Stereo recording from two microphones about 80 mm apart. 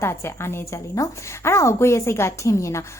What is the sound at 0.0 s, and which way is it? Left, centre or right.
A woman's voice, left.